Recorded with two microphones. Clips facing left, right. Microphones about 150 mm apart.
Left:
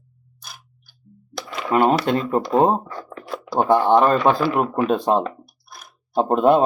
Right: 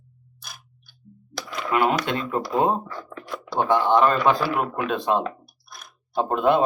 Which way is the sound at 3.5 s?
35° left (ahead or behind).